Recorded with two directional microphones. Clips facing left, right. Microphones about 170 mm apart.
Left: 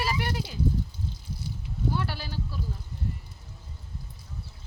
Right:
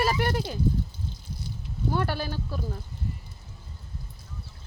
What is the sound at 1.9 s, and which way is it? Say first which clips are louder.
Speech: right 4 dB; 50° right (ahead or behind).